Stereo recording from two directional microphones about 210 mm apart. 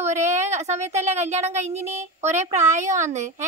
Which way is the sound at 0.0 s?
35° right (ahead or behind).